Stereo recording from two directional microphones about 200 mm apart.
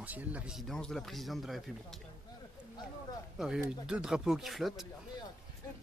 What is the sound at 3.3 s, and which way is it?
Speech, 5° right (ahead or behind).